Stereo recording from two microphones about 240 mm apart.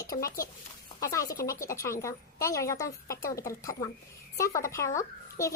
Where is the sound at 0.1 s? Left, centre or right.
Left.